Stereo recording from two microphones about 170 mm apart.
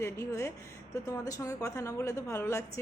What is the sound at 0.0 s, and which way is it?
A woman's voice, 15° left (ahead or behind).